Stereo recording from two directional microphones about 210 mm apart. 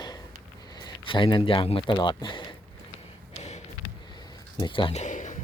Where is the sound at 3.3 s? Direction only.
30° left (ahead or behind).